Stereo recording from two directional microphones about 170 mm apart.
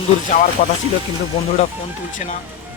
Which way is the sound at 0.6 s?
45° left (ahead or behind).